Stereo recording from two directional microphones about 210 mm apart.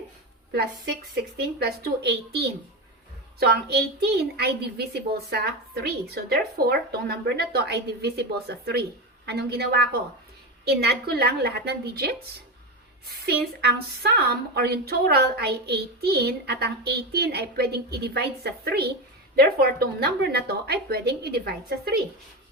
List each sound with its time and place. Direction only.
1.5 s a woman's voice: 50° right (ahead or behind)